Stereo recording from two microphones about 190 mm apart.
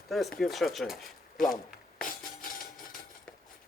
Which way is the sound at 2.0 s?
45° left (ahead or behind).